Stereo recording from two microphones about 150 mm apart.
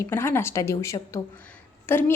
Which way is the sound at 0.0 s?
15° left (ahead or behind).